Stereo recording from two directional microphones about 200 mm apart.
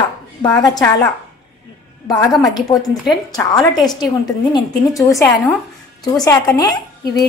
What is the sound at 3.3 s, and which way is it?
A woman's voice, 15° left (ahead or behind).